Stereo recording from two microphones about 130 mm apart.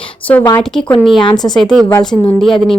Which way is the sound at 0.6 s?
5° left (ahead or behind).